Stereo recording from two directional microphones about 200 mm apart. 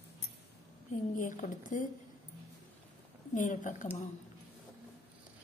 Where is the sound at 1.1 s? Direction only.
40° left (ahead or behind).